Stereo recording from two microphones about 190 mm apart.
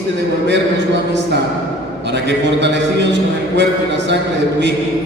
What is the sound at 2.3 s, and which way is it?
Speech, 65° right (ahead or behind).